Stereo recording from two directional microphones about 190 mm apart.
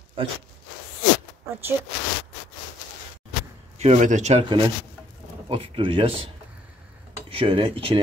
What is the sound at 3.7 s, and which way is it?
Speech, 35° right (ahead or behind).